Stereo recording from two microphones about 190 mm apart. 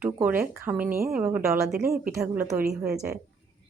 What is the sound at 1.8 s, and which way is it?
Speech, 50° right (ahead or behind).